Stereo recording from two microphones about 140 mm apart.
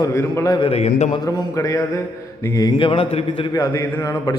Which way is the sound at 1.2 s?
25° left (ahead or behind).